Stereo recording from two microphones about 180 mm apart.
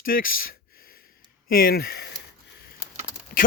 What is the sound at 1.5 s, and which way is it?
Speech, 55° left (ahead or behind).